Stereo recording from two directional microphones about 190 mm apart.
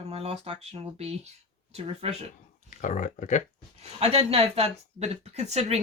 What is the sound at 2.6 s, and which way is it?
Speech, 40° left (ahead or behind).